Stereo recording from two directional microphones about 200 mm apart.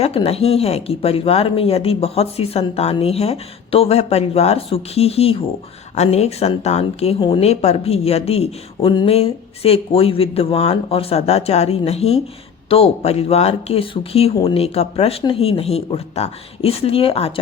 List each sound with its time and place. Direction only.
0.0 s a woman's voice: 30° left (ahead or behind)